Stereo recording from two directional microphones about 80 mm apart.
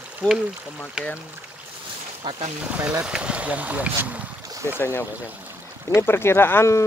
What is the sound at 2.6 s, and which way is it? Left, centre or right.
Speech, centre.